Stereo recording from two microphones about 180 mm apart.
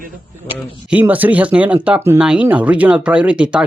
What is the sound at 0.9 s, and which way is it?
Speech, 10° right (ahead or behind).